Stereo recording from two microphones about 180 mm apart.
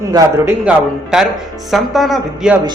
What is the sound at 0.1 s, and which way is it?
Speech, 20° right (ahead or behind).